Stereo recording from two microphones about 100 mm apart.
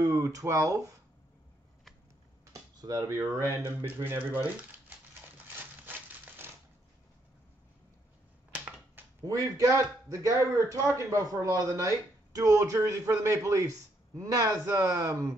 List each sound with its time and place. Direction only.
0.0 s speech: 35° right (ahead or behind)
2.8 s speech: 45° right (ahead or behind)
3.1 s speech: 30° right (ahead or behind)
5.9 s crumpling: 20° right (ahead or behind)
8.5 s a sound: 20° right (ahead or behind)
9.2 s a man's voice: 35° right (ahead or behind)